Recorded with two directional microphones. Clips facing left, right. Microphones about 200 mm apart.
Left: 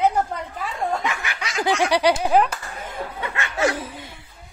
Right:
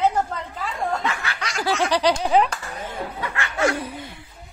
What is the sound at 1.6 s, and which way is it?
Speech, 15° left (ahead or behind).